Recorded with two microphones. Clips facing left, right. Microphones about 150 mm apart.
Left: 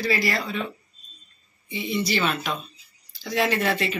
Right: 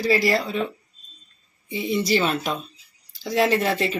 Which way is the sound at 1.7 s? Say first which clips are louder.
Right 4 dB; 40° right (ahead or behind).